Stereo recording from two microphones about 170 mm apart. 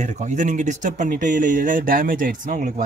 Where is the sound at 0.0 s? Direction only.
50° right (ahead or behind).